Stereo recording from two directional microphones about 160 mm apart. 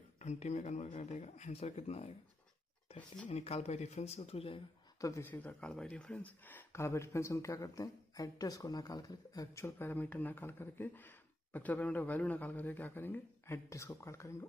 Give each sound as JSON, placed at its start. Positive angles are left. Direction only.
{"t": 0.2, "sound": "speech", "side_deg": 45}
{"t": 3.3, "sound": "speech", "side_deg": 40}
{"t": 5.0, "sound": "speech", "side_deg": 15}